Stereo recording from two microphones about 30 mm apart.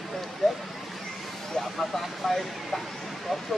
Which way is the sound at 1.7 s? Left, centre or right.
Centre.